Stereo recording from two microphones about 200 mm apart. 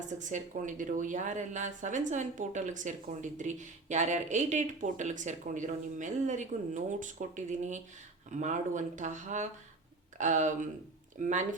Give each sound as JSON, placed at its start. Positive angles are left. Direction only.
{"t": 0.2, "sound": "speech", "side_deg": -40}